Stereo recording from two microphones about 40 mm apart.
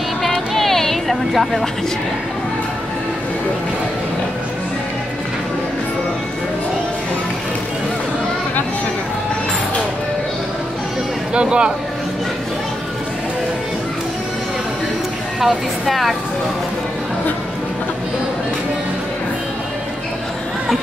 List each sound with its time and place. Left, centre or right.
0.6 s a sound: centre
11.3 s speech: right
15.4 s speech: centre